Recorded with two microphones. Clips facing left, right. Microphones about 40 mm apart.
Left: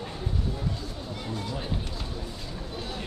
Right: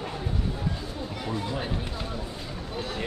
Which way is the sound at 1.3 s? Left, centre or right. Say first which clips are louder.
Right 4 dB; right.